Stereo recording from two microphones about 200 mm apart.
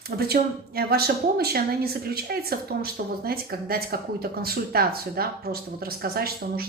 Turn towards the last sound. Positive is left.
turn(degrees=-50)  # may be behind; listen again after turning